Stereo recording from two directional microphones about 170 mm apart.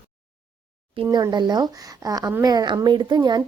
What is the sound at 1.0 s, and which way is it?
Speech, 25° right (ahead or behind).